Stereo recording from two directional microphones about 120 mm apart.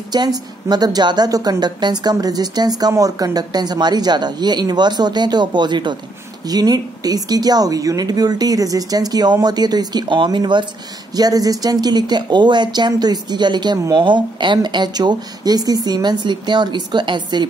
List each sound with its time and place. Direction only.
0.1 s speech: 35° right (ahead or behind)